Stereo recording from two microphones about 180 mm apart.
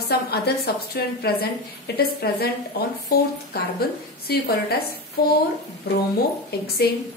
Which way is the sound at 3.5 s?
60° left (ahead or behind).